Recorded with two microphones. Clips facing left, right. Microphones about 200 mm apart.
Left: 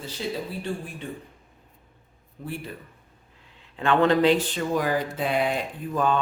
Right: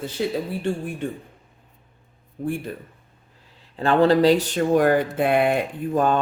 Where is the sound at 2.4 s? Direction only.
55° right (ahead or behind).